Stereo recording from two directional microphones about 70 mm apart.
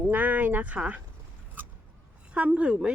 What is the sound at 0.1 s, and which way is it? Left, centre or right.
Speech, right.